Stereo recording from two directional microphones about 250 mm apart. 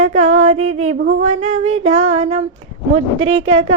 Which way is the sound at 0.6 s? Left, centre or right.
Right.